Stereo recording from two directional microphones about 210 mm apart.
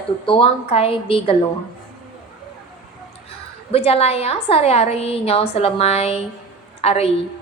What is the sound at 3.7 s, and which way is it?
A woman's voice, 30° left (ahead or behind).